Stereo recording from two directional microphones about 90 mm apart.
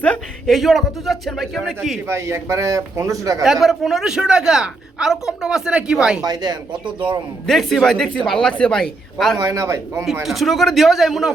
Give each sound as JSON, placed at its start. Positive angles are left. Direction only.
{"t": 0.4, "sound": "a man's voice", "side_deg": 0}
{"t": 2.0, "sound": "speech", "side_deg": -30}
{"t": 3.4, "sound": "a woman's voice", "side_deg": 0}
{"t": 6.2, "sound": "speech", "side_deg": -50}
{"t": 7.4, "sound": "a man's voice", "side_deg": 5}
{"t": 9.4, "sound": "speech", "side_deg": -35}
{"t": 10.2, "sound": "a man's voice", "side_deg": 0}